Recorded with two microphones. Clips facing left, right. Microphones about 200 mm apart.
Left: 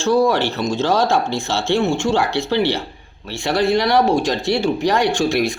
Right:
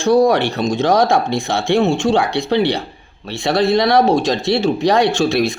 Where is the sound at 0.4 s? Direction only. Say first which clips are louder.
Right 3 dB; 15° right (ahead or behind).